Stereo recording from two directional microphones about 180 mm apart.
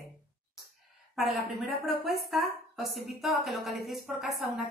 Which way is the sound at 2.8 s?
60° right (ahead or behind).